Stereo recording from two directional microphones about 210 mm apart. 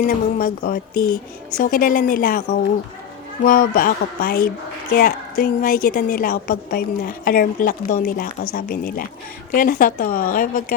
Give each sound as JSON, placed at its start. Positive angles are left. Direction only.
{"t": 0.0, "sound": "a woman's voice", "side_deg": 40}